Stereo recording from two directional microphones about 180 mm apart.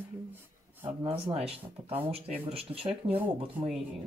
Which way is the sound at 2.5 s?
30° right (ahead or behind).